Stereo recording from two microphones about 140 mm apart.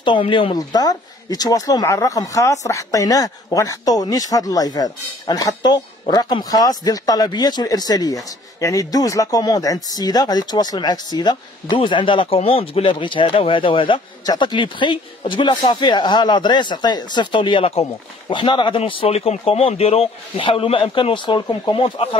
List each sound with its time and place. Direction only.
0.0 s speech: 35° left (ahead or behind)